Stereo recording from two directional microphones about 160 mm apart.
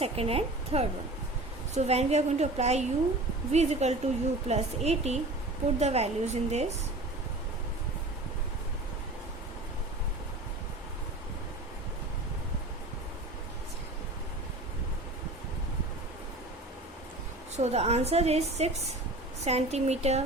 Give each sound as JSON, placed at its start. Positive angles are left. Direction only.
{"t": 0.0, "sound": "a woman's voice", "side_deg": -40}
{"t": 17.6, "sound": "a woman's voice", "side_deg": -40}